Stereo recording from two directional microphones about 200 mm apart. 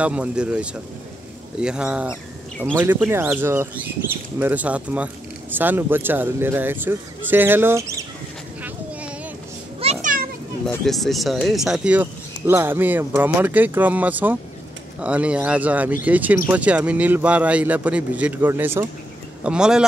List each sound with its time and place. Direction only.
0.0 s speech: 5° right (ahead or behind)
8.6 s a sound: 5° right (ahead or behind)
9.8 s children playing: 30° right (ahead or behind)
10.9 s speech: centre (ahead or behind)